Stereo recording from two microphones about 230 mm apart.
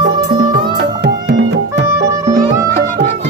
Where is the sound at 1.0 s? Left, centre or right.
Right.